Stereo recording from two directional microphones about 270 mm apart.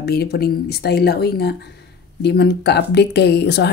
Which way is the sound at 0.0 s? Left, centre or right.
Left.